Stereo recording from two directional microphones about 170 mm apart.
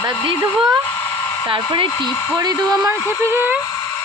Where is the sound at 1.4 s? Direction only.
30° right (ahead or behind); by 3.6 s 15° right (ahead or behind).